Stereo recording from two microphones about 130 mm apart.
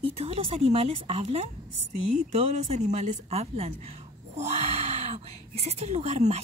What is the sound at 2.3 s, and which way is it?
A woman's voice, 55° right (ahead or behind).